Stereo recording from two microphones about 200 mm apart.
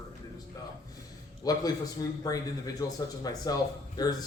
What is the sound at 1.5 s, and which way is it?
A man's voice, 20° left (ahead or behind).